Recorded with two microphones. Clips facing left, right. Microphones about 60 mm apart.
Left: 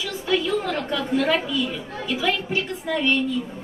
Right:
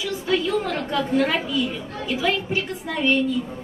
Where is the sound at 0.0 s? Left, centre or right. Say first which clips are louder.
Right 1 dB; centre.